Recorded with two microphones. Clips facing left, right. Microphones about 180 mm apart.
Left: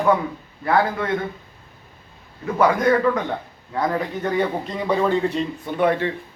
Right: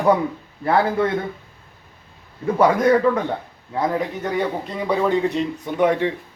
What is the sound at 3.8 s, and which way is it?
A man's voice, 15° right (ahead or behind).